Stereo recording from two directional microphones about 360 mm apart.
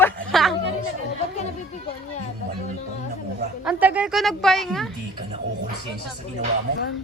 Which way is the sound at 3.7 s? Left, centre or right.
Centre.